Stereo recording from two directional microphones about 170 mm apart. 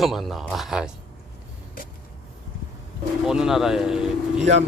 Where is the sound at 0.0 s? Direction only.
Centre (ahead or behind).